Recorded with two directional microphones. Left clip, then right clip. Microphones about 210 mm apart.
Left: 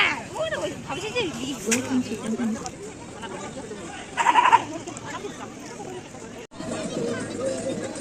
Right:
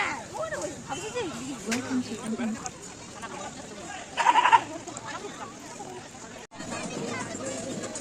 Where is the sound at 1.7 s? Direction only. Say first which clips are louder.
Left 6 dB; 40° right (ahead or behind).